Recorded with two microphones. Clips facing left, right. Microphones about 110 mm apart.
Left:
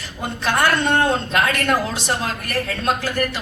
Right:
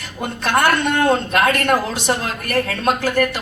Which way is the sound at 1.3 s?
50° right (ahead or behind).